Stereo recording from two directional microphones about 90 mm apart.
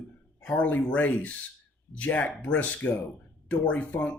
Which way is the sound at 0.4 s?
15° left (ahead or behind).